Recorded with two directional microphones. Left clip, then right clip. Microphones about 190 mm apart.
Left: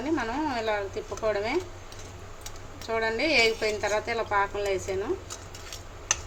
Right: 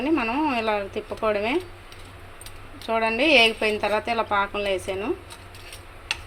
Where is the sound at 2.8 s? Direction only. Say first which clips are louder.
Right 5 dB; 20° right (ahead or behind).